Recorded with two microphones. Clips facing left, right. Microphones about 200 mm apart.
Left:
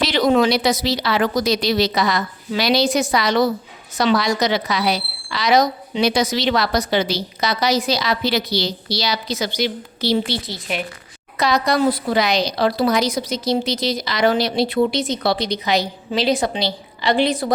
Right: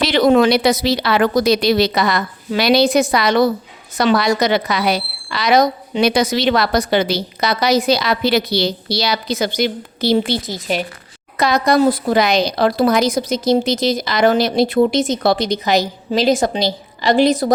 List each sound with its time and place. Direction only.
0.0 s a woman's voice: 55° right (ahead or behind); by 10.8 s 40° right (ahead or behind)
11.3 s speech: 50° right (ahead or behind)